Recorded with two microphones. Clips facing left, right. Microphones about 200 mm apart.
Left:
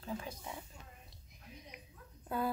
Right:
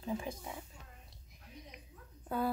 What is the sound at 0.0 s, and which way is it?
Speech, 15° right (ahead or behind).